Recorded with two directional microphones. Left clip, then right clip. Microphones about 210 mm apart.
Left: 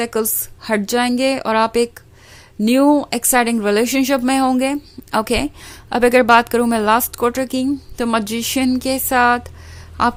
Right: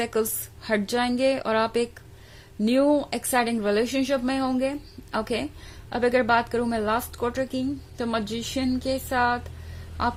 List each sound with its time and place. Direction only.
0.0 s a woman's voice: 25° left (ahead or behind)